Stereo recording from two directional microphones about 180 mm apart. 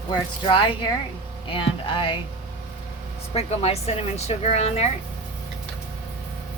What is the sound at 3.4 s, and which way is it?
A woman's voice, 35° left (ahead or behind).